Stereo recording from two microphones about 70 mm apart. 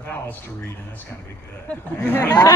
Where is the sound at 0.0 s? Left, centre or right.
Left.